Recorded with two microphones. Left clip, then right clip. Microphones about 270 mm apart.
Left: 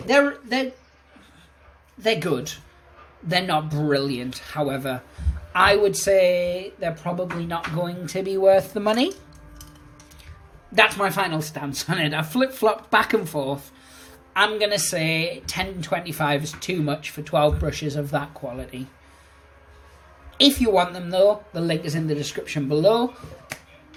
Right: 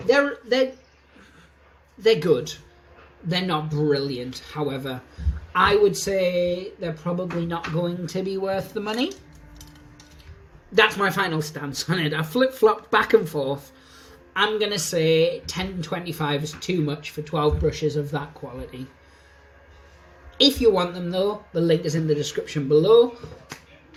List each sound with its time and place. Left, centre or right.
0.1 s speech: centre
2.0 s speech: centre
10.8 s speech: centre
20.4 s speech: left